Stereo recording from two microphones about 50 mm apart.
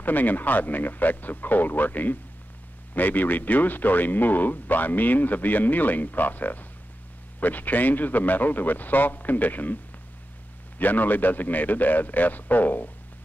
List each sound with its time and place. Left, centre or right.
0.0 s speech: left
10.8 s speech: left